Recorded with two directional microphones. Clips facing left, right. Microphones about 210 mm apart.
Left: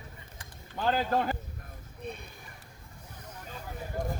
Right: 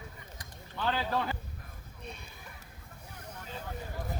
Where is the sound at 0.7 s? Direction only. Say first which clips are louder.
Left 4 dB; 45° left (ahead or behind).